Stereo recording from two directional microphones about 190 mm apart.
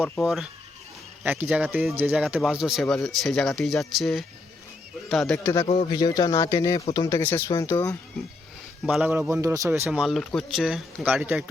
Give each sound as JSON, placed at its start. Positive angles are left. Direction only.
{"t": 0.0, "sound": "a man's voice", "side_deg": 0}
{"t": 5.6, "sound": "speech", "side_deg": 30}
{"t": 8.9, "sound": "a man's voice", "side_deg": -5}
{"t": 10.0, "sound": "a man's voice", "side_deg": 0}